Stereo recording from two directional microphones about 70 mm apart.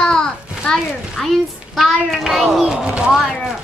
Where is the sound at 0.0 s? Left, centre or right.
Centre.